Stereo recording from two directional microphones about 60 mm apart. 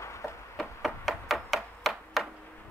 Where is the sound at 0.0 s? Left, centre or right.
Left.